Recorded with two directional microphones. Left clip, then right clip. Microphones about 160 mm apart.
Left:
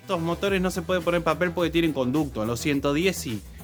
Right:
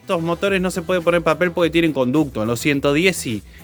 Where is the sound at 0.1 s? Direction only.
30° right (ahead or behind).